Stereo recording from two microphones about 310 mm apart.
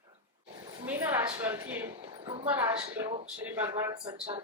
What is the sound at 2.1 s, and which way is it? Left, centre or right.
Speech, centre.